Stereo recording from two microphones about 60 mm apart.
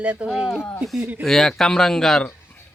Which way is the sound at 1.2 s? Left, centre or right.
Centre.